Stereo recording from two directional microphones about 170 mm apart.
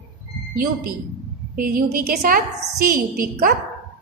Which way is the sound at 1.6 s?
55° right (ahead or behind).